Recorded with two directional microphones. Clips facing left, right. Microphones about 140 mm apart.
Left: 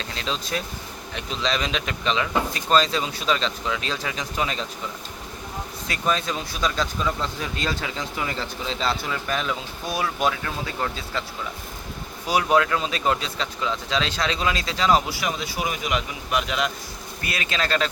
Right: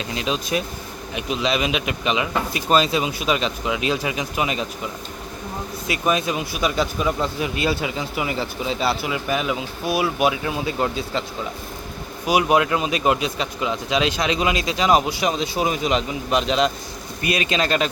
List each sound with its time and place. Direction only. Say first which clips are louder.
0.0 s speech: right 5 dB; 15° right (ahead or behind)
5.9 s speech: right 4 dB; 10° right (ahead or behind)
12.2 s speech: right 2 dB; 15° right (ahead or behind)